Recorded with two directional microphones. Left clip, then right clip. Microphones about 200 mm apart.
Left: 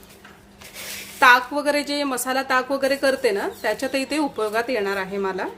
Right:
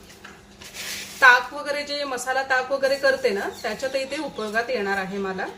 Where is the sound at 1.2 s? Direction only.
50° left (ahead or behind).